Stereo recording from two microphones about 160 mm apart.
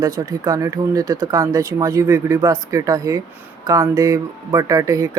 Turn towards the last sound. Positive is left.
turn(degrees=-20)  # may be behind; listen again after turning